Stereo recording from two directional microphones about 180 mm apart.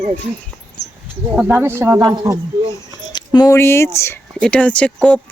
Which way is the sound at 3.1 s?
20° left (ahead or behind).